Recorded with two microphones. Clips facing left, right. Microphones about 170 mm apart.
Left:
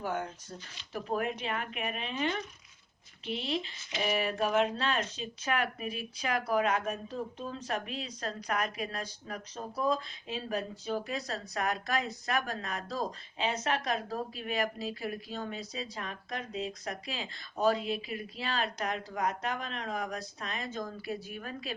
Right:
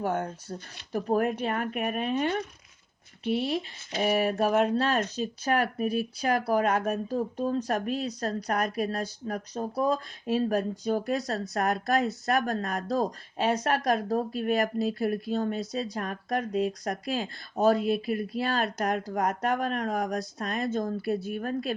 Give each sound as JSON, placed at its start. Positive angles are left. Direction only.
{"t": 0.1, "sound": "speech", "side_deg": -40}
{"t": 3.4, "sound": "speech", "side_deg": -45}
{"t": 20.7, "sound": "speech", "side_deg": -35}
{"t": 21.0, "sound": "speech", "side_deg": -55}